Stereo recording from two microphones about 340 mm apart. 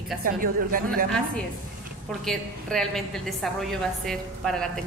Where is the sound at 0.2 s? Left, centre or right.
Right.